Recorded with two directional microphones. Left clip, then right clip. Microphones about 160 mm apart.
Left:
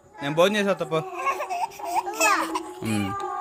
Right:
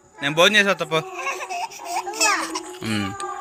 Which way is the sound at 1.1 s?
90° left.